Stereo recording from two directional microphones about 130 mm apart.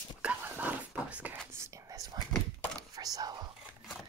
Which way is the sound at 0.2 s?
10° right (ahead or behind).